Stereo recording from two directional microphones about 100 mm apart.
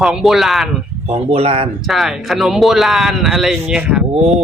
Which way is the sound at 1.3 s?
85° right.